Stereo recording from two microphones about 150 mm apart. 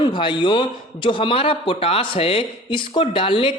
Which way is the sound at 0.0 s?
35° left (ahead or behind).